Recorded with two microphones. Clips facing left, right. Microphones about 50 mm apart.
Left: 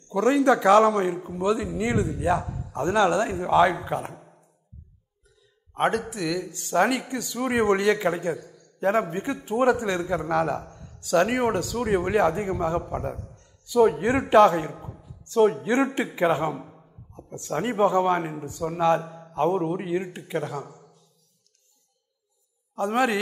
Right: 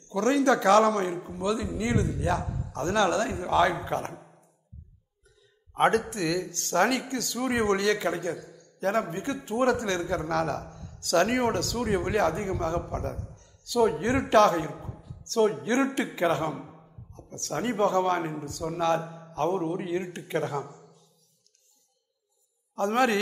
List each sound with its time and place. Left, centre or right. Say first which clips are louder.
0.1 s a man's voice: left 3 dB; centre
1.4 s a man's voice: left 4 dB; centre
5.8 s a man's voice: right 1 dB; centre
16.5 s a sound: left 2 dB; centre
17.1 s a man's voice: left 4 dB; centre
19.0 s a sound: left 1 dB; centre
19.3 s a man's voice: left 4 dB; centre
22.8 s a man's voice: left 1 dB; centre